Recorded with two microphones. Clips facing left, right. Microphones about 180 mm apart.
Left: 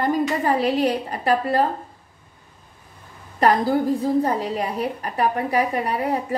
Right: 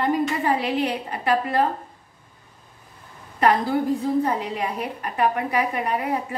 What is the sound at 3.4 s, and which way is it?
A woman's voice, 40° left (ahead or behind).